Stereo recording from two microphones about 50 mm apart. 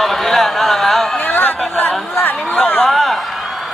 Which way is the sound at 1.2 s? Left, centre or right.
Left.